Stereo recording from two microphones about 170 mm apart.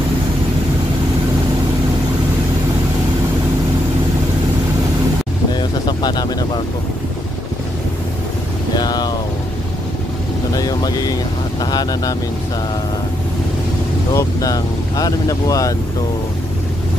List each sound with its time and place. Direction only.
5.6 s vehicle: 25° left (ahead or behind)
8.7 s vehicle: 25° left (ahead or behind)
10.5 s vehicle: 20° left (ahead or behind)
14.1 s speech: 20° left (ahead or behind)